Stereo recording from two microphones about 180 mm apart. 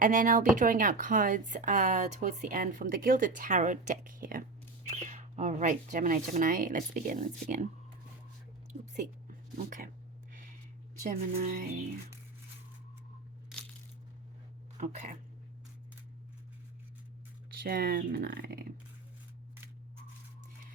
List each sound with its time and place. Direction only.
0.0 s a woman's voice: 45° right (ahead or behind)
9.0 s speech: 45° right (ahead or behind)
11.0 s a woman's voice: 45° right (ahead or behind)
14.8 s a woman's voice: 45° right (ahead or behind)
17.6 s speech: 55° right (ahead or behind)